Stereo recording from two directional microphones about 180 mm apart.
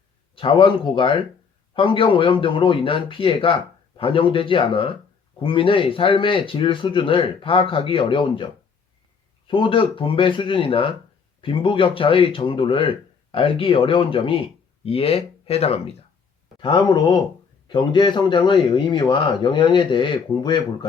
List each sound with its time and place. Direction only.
0.3 s speech: 30° left (ahead or behind)
9.5 s speech: 30° left (ahead or behind)